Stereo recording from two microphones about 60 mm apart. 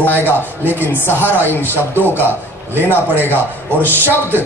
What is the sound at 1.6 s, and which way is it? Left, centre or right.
A man's voice, right.